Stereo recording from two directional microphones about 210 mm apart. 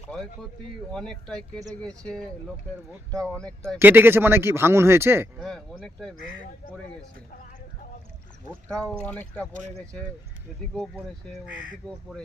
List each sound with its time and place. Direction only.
0.9 s speech: 5° left (ahead or behind)
3.8 s speech: 10° right (ahead or behind)
5.4 s speech: 5° left (ahead or behind)
8.6 s speech: 5° left (ahead or behind)
9.5 s speech: 35° right (ahead or behind)
11.8 s speech: 5° left (ahead or behind)